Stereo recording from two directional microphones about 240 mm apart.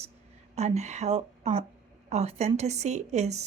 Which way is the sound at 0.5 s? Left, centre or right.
Right.